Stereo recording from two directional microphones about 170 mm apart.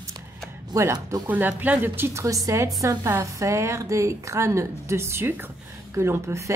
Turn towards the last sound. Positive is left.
turn(degrees=-15)  # may be behind; listen again after turning